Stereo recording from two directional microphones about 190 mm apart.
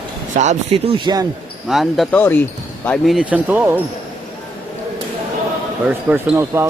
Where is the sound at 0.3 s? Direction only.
35° right (ahead or behind).